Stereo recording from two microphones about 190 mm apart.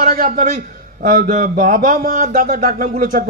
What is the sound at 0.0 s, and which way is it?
A man's voice, 45° right (ahead or behind).